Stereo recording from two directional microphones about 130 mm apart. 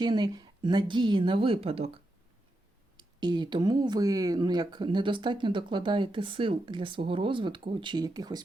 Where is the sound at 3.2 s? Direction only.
35° right (ahead or behind).